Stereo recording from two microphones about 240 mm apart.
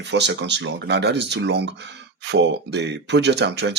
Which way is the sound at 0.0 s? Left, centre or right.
Right.